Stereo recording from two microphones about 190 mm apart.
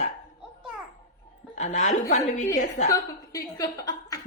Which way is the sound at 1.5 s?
40° left (ahead or behind).